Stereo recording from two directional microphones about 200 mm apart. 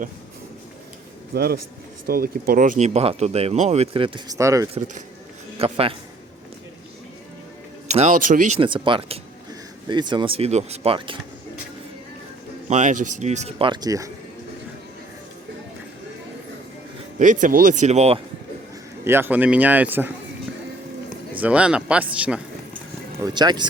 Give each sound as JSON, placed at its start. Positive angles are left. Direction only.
{"t": 1.3, "sound": "a man's voice", "side_deg": -55}
{"t": 5.5, "sound": "speech", "side_deg": -30}
{"t": 7.9, "sound": "speech", "side_deg": -35}
{"t": 12.6, "sound": "speech", "side_deg": -35}
{"t": 17.2, "sound": "speech", "side_deg": -40}
{"t": 19.0, "sound": "a man's voice", "side_deg": -10}
{"t": 21.3, "sound": "speech", "side_deg": -5}
{"t": 23.2, "sound": "speech", "side_deg": -20}